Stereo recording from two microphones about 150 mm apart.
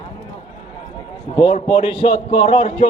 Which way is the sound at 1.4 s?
40° left (ahead or behind).